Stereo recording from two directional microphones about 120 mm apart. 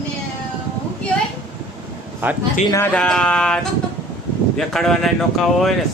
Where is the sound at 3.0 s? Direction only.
5° left (ahead or behind).